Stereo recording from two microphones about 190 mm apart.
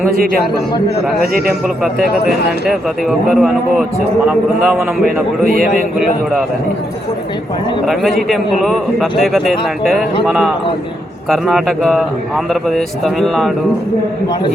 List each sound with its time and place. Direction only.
1.5 s speech: centre (ahead or behind)
5.5 s a man's voice: 50° right (ahead or behind)
7.9 s speech: centre (ahead or behind)